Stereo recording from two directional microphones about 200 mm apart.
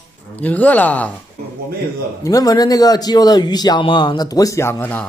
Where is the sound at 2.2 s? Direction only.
20° left (ahead or behind).